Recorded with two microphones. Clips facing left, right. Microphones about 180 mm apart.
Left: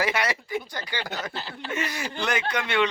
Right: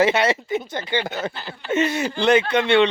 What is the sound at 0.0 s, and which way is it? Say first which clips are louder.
Speech: right 8 dB; 25° right (ahead or behind).